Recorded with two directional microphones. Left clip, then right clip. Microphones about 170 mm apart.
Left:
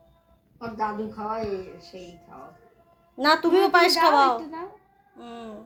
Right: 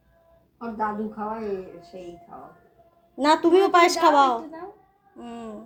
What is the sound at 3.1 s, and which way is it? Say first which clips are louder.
Speech: right 1 dB; 15° right (ahead or behind).